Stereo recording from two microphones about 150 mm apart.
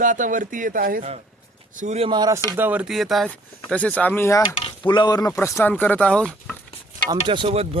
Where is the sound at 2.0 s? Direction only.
30° right (ahead or behind).